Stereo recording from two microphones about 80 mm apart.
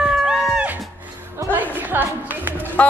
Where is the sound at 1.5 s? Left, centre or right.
Right.